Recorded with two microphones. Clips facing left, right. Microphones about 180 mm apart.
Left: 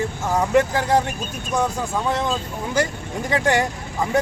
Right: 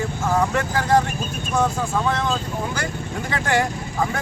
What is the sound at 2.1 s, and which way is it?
Speech, 15° left (ahead or behind).